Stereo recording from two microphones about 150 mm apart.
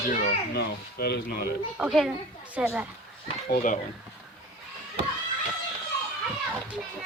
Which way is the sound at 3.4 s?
65° left (ahead or behind).